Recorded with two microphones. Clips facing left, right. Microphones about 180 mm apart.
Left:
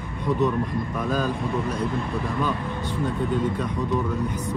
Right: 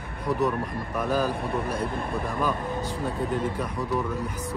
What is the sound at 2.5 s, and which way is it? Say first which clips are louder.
Speech: even; 35° right (ahead or behind).